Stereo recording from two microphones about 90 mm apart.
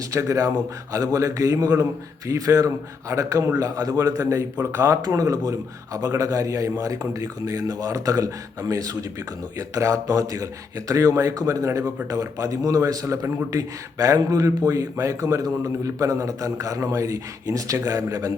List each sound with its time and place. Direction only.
0.1 s a man's voice: 35° right (ahead or behind)